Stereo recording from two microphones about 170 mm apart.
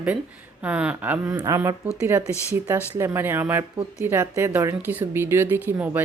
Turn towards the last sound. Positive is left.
turn(degrees=-10)  # may be behind; listen again after turning